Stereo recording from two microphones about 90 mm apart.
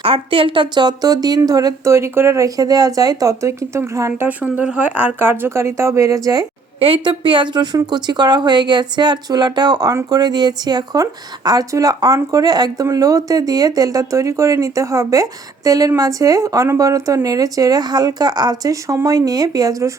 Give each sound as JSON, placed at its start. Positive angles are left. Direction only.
{"t": 0.0, "sound": "a woman's voice", "side_deg": -85}
{"t": 4.3, "sound": "speech", "side_deg": -20}
{"t": 6.7, "sound": "a woman's voice", "side_deg": -90}